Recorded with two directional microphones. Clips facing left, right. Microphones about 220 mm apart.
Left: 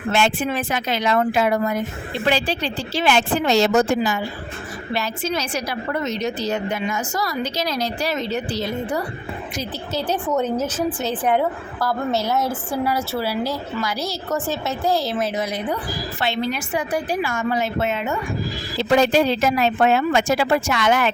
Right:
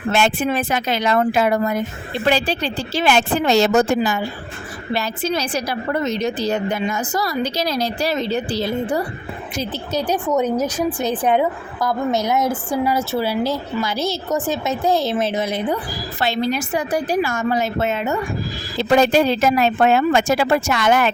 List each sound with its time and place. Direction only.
0.1 s speech: 40° right (ahead or behind)
4.9 s a woman's voice: 35° right (ahead or behind)
9.9 s a woman's voice: 15° right (ahead or behind)
16.2 s a woman's voice: 40° right (ahead or behind)